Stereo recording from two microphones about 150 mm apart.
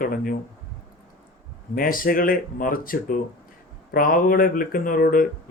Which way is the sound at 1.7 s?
70° left (ahead or behind).